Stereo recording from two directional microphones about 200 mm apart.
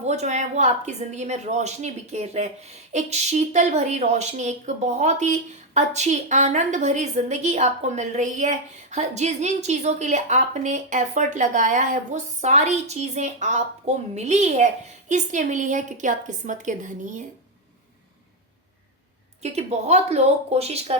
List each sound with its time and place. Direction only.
0.0 s a woman's voice: 35° right (ahead or behind)
19.4 s a woman's voice: 35° right (ahead or behind)